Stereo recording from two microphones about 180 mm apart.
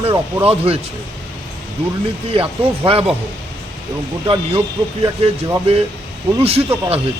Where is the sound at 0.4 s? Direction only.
35° right (ahead or behind).